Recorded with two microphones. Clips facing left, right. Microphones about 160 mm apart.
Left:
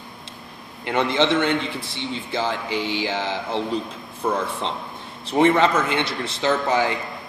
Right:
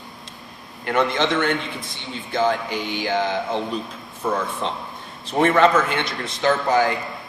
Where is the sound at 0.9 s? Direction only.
20° left (ahead or behind).